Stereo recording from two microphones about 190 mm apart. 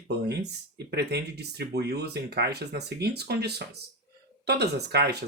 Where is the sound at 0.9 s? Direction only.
60° right (ahead or behind).